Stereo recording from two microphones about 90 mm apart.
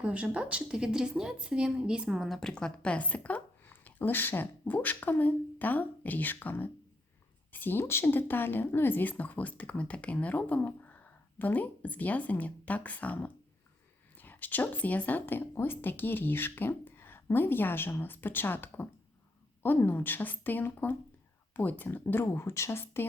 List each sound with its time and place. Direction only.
0.0 s a woman's voice: 15° right (ahead or behind); by 23.0 s 25° left (ahead or behind)